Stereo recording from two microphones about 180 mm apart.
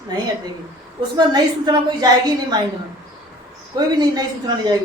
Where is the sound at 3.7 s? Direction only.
20° right (ahead or behind).